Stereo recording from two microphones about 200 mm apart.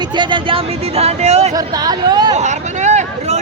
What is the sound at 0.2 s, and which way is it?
Speech, 25° right (ahead or behind).